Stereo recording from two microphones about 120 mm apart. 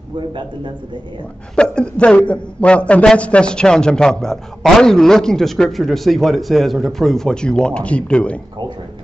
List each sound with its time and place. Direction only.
0.3 s a man's voice: 45° right (ahead or behind)
1.5 s a man's voice: 5° left (ahead or behind)